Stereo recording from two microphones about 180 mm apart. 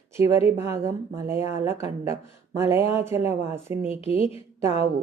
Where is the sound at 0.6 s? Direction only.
15° right (ahead or behind).